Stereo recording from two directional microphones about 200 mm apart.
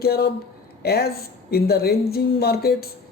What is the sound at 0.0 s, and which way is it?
Speech, 50° left (ahead or behind).